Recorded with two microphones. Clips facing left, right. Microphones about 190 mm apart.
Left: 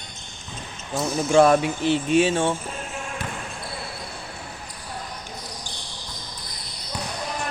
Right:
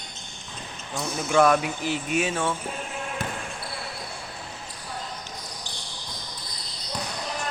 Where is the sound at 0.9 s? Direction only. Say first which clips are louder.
Left 5 dB; 30° left (ahead or behind).